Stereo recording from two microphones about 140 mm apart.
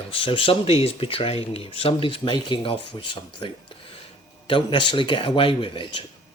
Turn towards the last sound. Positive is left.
turn(degrees=35)  # may be behind; listen again after turning